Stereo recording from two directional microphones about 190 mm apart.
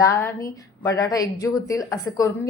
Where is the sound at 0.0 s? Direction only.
15° left (ahead or behind).